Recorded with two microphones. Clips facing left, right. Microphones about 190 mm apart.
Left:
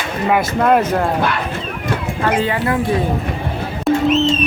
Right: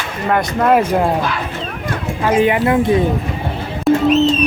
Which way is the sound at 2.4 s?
15° right (ahead or behind).